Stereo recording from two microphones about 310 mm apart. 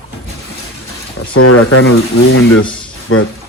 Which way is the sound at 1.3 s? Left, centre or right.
Left.